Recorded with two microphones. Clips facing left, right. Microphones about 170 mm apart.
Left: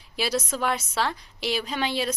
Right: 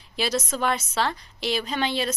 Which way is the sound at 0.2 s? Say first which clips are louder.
Right 1 dB; 10° left (ahead or behind).